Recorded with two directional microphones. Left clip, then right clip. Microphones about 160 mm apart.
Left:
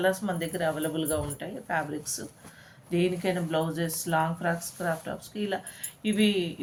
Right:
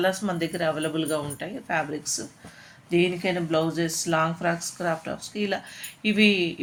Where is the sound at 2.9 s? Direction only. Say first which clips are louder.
Right 4 dB; 25° right (ahead or behind).